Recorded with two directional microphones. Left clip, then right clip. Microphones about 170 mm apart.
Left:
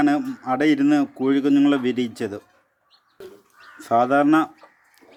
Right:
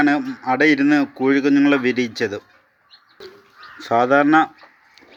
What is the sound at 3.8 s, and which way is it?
Speech, 15° left (ahead or behind).